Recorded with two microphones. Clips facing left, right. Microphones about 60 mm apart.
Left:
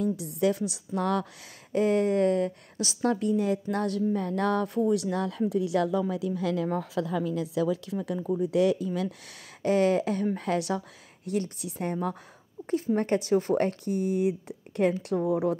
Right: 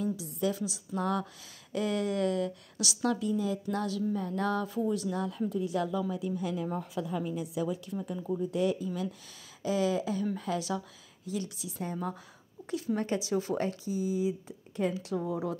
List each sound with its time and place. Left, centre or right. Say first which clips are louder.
0.0 s a woman's voice: left 5 dB; left
1.7 s speech: left 7 dB; left
3.2 s a woman's voice: left 5 dB; left
8.4 s speech: left 6 dB; left
12.7 s a woman's voice: left 6 dB; left